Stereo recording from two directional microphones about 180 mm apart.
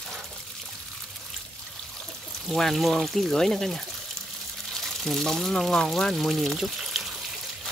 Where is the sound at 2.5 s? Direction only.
Centre (ahead or behind).